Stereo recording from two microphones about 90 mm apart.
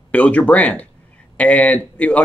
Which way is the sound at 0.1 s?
15° left (ahead or behind).